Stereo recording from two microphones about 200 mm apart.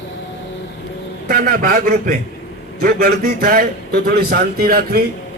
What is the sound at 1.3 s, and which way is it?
A man's voice, 50° right (ahead or behind).